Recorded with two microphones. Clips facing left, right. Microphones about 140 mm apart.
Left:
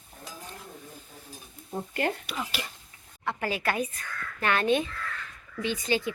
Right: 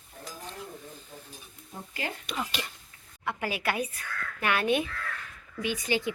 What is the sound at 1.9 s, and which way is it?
Speech, 55° left (ahead or behind).